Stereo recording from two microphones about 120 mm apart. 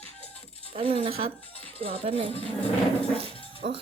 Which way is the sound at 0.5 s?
50° right (ahead or behind).